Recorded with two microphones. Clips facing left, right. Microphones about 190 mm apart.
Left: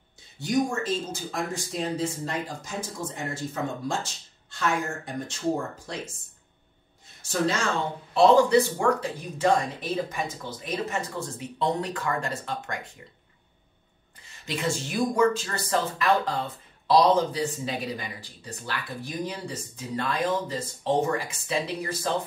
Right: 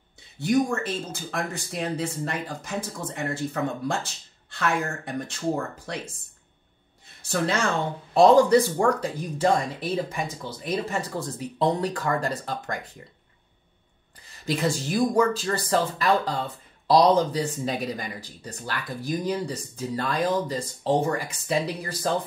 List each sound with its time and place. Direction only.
0.4 s speech: 60° right (ahead or behind)
7.2 s speech: 60° right (ahead or behind)
8.1 s speech: 45° right (ahead or behind)
14.3 s speech: 35° right (ahead or behind)